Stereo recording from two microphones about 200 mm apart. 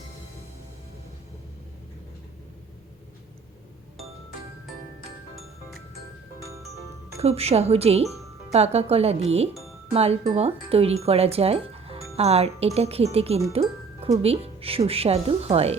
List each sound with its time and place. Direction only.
7.2 s speech: 30° right (ahead or behind)
13.5 s music: 30° right (ahead or behind)
14.2 s speech: 30° right (ahead or behind)